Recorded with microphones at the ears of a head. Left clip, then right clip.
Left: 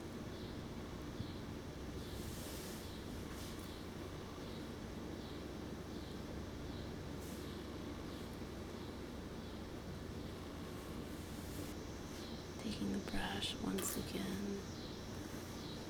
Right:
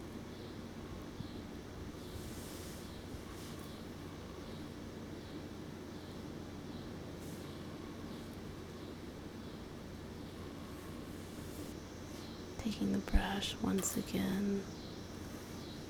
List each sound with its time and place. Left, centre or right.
12.6 s speech: right